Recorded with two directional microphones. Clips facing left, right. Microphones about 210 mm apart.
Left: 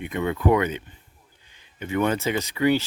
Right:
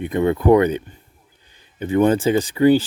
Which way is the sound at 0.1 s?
40° right (ahead or behind).